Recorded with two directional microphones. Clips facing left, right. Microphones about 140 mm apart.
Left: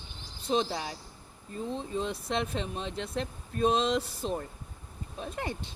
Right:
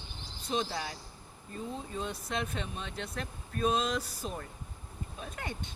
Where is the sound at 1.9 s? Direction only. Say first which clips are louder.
Left 5 dB; 30° left (ahead or behind).